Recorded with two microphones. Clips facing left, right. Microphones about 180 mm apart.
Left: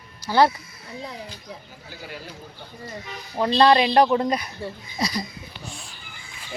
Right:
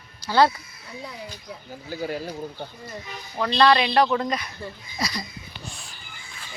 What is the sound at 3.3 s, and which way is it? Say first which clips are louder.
Speech: left 2 dB; 25° left (ahead or behind).